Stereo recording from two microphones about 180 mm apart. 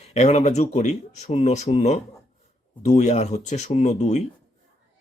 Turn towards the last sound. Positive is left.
turn(degrees=40)  # may be behind; listen again after turning